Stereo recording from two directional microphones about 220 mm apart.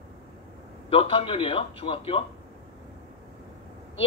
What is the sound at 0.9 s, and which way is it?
A man's voice, 25° left (ahead or behind).